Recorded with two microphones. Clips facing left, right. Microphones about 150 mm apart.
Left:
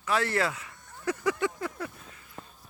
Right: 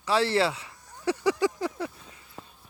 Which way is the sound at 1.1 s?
30° right (ahead or behind).